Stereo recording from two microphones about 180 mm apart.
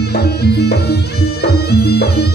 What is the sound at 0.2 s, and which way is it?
Music, 65° left (ahead or behind).